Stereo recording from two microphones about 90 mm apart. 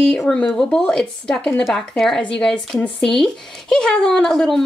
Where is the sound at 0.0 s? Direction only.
5° left (ahead or behind).